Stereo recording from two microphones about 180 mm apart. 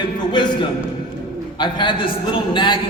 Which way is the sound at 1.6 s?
25° left (ahead or behind).